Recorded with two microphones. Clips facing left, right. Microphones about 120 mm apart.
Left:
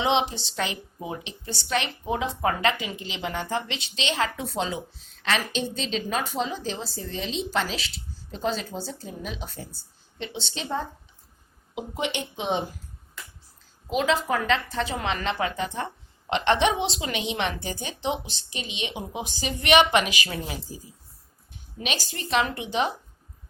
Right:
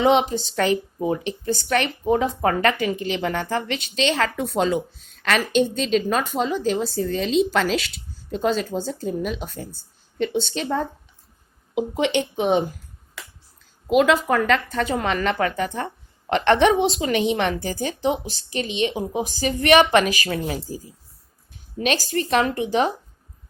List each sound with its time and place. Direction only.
0.0 s speech: 45° right (ahead or behind)
12.1 s a woman's voice: 60° right (ahead or behind)
13.9 s a woman's voice: 55° right (ahead or behind); by 22.9 s 40° right (ahead or behind)